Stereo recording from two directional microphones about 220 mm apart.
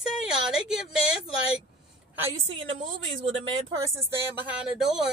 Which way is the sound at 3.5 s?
15° right (ahead or behind).